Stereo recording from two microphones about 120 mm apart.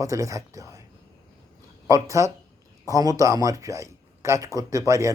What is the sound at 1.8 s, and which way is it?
Speech, 30° right (ahead or behind).